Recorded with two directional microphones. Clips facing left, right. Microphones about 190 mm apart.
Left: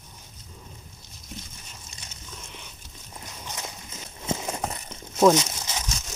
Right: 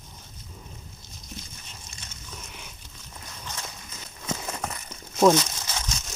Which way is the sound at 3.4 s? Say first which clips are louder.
Left 1 dB; 15° left (ahead or behind).